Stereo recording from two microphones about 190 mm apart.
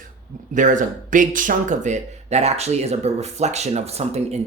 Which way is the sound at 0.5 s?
40° right (ahead or behind).